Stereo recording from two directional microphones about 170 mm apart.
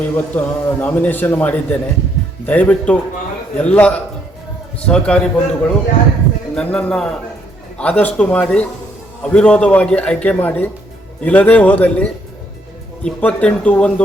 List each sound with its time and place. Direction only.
0.1 s a man's voice: 10° left (ahead or behind)